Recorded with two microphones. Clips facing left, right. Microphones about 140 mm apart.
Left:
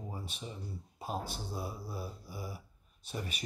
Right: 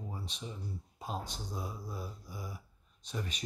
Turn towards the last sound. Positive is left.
turn(degrees=5)  # may be behind; listen again after turning